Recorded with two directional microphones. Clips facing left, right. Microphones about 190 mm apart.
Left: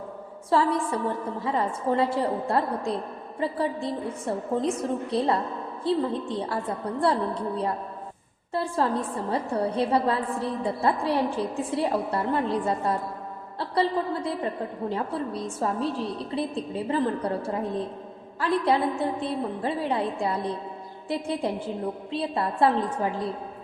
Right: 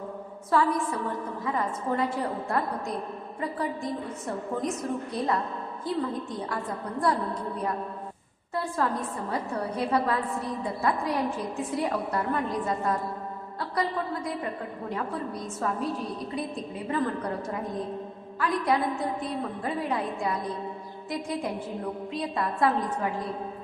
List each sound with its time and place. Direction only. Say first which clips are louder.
0.5 s a woman's voice: left 2 dB; 30° left (ahead or behind)